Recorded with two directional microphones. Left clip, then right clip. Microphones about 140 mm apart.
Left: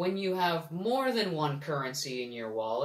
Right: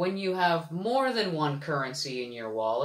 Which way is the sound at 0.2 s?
20° right (ahead or behind).